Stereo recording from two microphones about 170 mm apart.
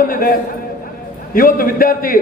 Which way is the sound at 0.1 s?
55° left (ahead or behind).